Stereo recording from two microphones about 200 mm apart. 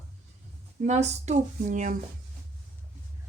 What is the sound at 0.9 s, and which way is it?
Speech, 35° right (ahead or behind).